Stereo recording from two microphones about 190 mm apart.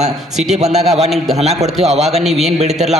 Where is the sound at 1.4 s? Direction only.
35° right (ahead or behind).